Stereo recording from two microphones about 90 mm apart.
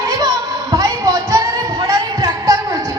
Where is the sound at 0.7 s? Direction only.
40° right (ahead or behind).